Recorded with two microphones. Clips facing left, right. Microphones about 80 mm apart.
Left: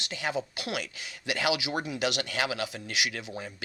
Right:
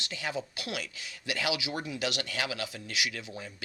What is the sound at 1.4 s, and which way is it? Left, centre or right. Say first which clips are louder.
Speech: left 4 dB; left.